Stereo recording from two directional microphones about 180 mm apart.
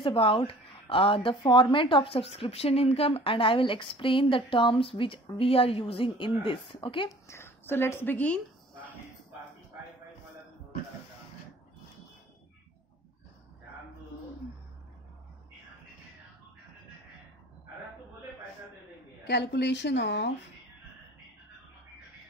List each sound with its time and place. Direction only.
0.0 s speech: 30° left (ahead or behind)
7.2 s a woman's voice: 15° left (ahead or behind)
19.2 s a woman's voice: 70° left (ahead or behind)